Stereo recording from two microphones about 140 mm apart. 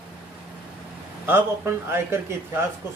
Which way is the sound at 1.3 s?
15° right (ahead or behind).